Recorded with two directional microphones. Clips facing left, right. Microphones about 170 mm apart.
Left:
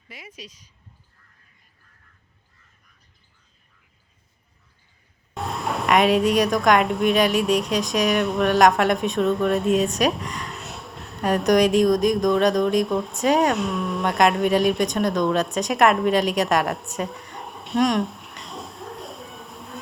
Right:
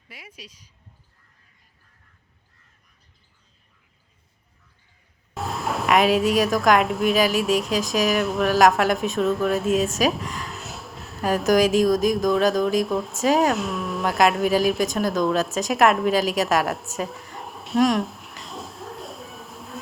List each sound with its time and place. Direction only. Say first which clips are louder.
0.1 s speech: left 3 dB; 10° right (ahead or behind)
5.3 s speech: even; centre (ahead or behind)